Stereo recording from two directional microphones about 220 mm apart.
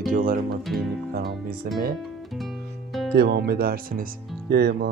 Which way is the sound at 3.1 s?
45° right (ahead or behind).